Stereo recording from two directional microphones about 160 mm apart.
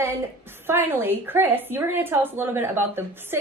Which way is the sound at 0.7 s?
15° right (ahead or behind).